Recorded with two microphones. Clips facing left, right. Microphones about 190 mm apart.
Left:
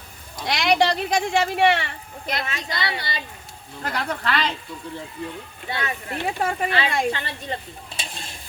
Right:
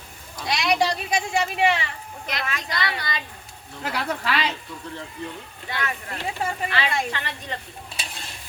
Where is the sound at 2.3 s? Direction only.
25° left (ahead or behind).